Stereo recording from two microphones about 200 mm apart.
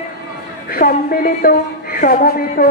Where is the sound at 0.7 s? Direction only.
50° left (ahead or behind).